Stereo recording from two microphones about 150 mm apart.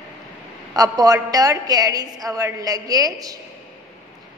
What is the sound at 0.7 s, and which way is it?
A woman's voice, 25° right (ahead or behind).